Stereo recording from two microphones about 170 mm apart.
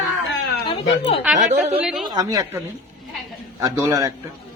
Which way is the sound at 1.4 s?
45° right (ahead or behind).